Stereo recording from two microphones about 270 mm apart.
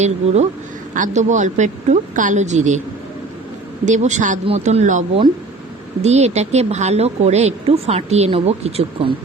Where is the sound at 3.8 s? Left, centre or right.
Right.